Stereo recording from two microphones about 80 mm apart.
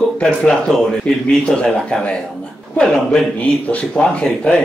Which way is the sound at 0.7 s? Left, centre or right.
Centre.